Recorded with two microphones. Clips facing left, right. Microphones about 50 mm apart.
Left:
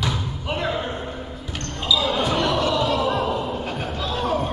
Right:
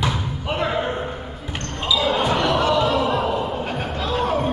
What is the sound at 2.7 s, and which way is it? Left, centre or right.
Slam, centre.